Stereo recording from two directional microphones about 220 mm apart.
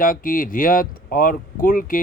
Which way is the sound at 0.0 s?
40° left (ahead or behind).